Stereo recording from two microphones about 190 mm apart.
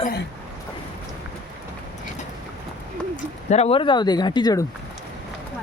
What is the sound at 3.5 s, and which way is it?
Speech, 35° left (ahead or behind).